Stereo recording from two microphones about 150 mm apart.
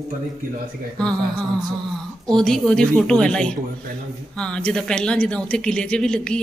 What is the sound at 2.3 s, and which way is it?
Speech, 5° left (ahead or behind).